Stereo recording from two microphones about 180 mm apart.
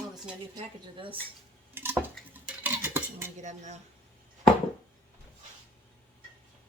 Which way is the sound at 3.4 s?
40° right (ahead or behind).